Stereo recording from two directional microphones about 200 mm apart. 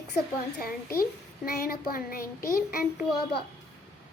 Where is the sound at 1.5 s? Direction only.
50° left (ahead or behind).